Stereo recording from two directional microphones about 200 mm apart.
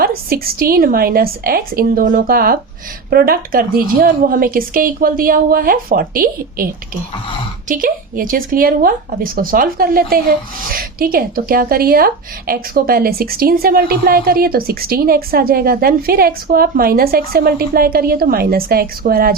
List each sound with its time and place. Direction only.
0.0 s speech: 50° right (ahead or behind)
7.7 s speech: 45° right (ahead or behind)